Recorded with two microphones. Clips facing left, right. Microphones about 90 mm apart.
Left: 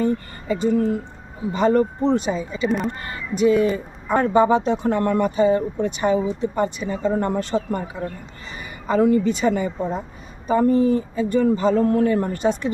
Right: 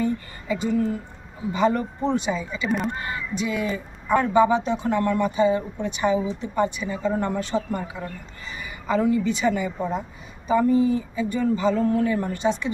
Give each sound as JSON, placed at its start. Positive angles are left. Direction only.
{"t": 0.0, "sound": "speech", "side_deg": 45}
{"t": 2.6, "sound": "speech", "side_deg": 0}
{"t": 3.3, "sound": "speech", "side_deg": 40}
{"t": 8.9, "sound": "speech", "side_deg": 50}
{"t": 9.2, "sound": "speech", "side_deg": 40}